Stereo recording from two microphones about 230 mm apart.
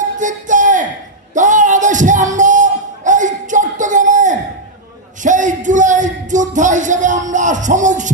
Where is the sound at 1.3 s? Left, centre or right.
Right.